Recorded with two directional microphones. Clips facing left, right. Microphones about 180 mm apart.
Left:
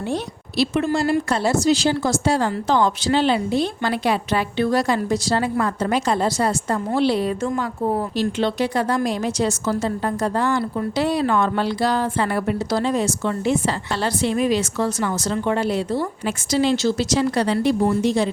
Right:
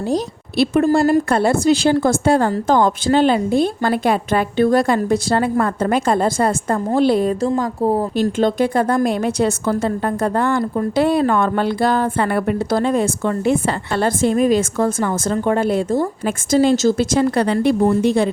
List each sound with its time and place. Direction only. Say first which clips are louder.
0.5 s a woman's voice: right 5 dB; 55° right (ahead or behind)